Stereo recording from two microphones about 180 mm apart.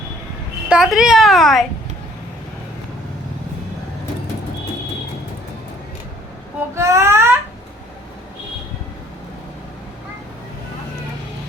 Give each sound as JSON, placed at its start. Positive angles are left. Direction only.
{"t": 0.7, "sound": "a child's voice", "side_deg": -5}
{"t": 6.7, "sound": "babbling", "side_deg": -15}